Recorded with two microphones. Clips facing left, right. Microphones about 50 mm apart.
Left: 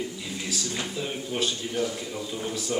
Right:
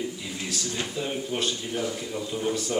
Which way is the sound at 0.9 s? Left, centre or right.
Centre.